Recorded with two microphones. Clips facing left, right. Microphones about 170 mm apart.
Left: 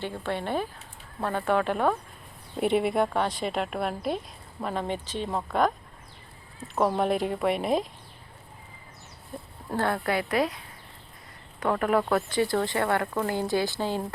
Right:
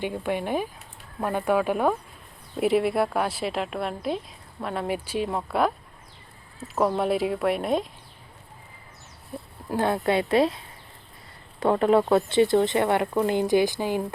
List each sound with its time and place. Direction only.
0.0 s speech: 15° right (ahead or behind)
9.7 s speech: 20° right (ahead or behind)
11.6 s speech: 25° right (ahead or behind)